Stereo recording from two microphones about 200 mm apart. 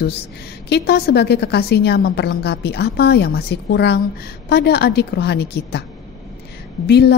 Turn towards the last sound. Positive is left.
turn(degrees=55)  # may be behind; listen again after turning